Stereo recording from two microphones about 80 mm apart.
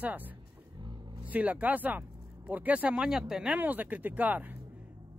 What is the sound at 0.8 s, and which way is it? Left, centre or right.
Vehicle, right.